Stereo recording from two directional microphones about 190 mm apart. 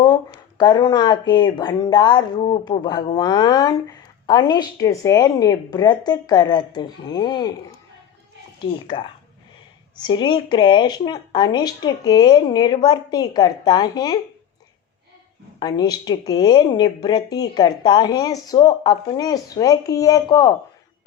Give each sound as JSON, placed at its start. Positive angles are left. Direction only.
{"t": 0.0, "sound": "a woman's voice", "side_deg": 25}
{"t": 10.0, "sound": "a woman's voice", "side_deg": 25}
{"t": 15.5, "sound": "a woman's voice", "side_deg": 20}